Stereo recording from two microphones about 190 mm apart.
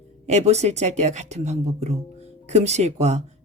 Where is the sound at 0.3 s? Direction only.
35° right (ahead or behind).